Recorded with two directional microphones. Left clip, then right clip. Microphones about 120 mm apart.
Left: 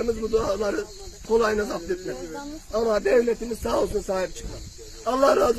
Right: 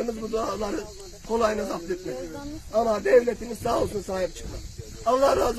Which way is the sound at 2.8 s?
30° right (ahead or behind).